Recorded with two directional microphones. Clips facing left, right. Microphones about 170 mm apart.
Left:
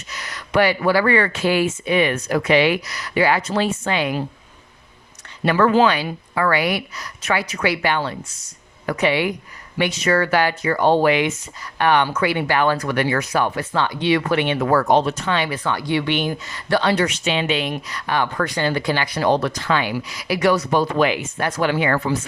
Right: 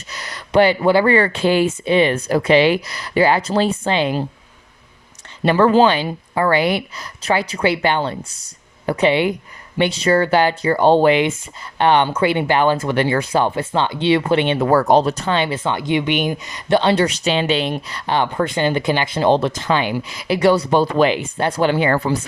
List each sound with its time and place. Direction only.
0.1 s speech: 35° right (ahead or behind)
5.4 s speech: 30° right (ahead or behind)